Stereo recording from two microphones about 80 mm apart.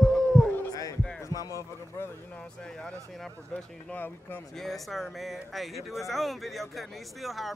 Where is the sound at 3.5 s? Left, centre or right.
Left.